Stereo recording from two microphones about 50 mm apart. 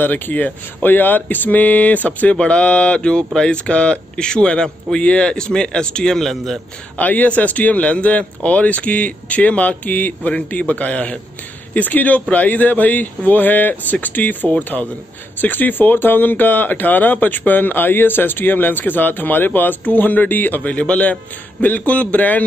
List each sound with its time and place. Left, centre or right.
0.0 s speech: left
2.3 s speech: left; by 6.6 s centre
7.0 s speech: left